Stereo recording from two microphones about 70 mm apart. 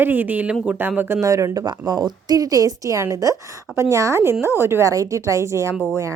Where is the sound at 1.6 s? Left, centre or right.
Right.